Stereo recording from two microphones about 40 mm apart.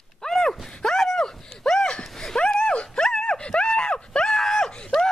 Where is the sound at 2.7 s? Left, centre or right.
Left.